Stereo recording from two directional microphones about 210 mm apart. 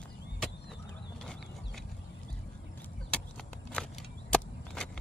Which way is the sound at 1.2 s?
Centre (ahead or behind).